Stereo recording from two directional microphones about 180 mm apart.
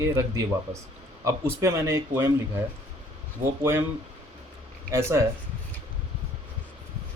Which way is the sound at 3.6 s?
15° right (ahead or behind).